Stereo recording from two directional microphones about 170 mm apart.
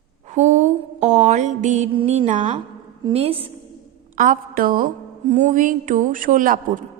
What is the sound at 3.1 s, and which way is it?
Speech, 35° right (ahead or behind).